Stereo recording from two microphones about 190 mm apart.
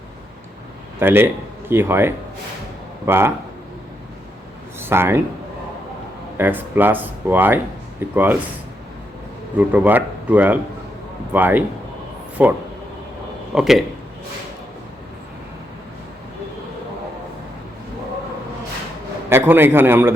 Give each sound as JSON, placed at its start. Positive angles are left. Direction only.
{"t": 0.9, "sound": "speech", "side_deg": -10}
{"t": 4.8, "sound": "a man's voice", "side_deg": -10}
{"t": 6.3, "sound": "speech", "side_deg": -10}
{"t": 9.6, "sound": "speech", "side_deg": -10}
{"t": 19.3, "sound": "speech", "side_deg": -10}